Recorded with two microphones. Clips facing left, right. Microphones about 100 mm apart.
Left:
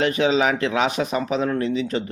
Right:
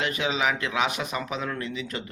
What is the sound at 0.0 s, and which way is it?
Speech, 35° left (ahead or behind).